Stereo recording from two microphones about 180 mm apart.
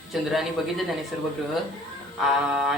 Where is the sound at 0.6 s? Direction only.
Centre (ahead or behind).